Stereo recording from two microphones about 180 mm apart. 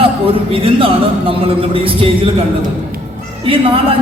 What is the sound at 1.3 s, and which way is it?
Speech, 30° right (ahead or behind).